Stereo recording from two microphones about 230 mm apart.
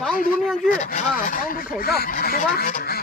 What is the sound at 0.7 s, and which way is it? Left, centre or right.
Speech, left.